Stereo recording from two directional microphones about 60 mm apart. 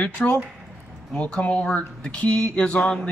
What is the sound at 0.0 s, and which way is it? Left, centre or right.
Speech, left.